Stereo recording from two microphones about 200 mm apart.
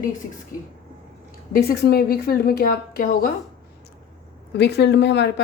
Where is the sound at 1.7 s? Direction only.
50° left (ahead or behind).